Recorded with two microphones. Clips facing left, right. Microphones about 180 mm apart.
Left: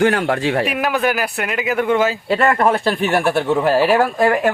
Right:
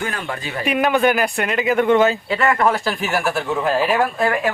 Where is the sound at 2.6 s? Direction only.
30° left (ahead or behind).